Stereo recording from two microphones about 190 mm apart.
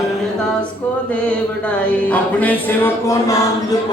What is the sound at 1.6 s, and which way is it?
Music, 10° left (ahead or behind).